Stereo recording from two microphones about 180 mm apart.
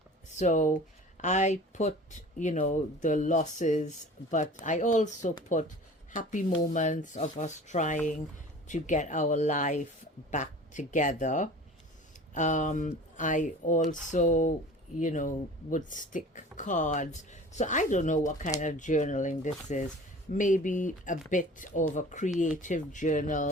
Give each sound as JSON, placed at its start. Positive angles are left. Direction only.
{"t": 0.3, "sound": "speech", "side_deg": 45}